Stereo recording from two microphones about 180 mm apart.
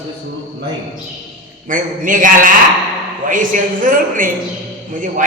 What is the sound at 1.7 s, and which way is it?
A man's voice, 45° right (ahead or behind).